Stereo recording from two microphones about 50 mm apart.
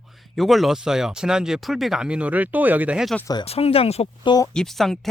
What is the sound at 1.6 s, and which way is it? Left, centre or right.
Speech, centre.